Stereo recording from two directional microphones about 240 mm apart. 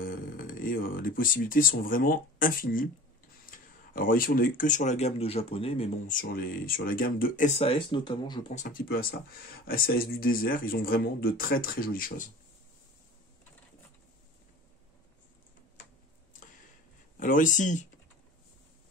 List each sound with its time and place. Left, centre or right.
0.0 s speech: left
17.2 s speech: left